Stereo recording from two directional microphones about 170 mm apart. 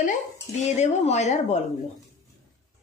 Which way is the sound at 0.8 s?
40° left (ahead or behind).